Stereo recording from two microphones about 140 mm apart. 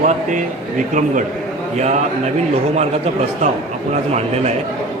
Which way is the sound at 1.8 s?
55° right (ahead or behind).